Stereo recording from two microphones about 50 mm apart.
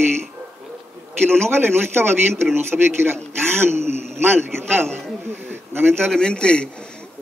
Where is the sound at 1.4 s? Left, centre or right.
Right.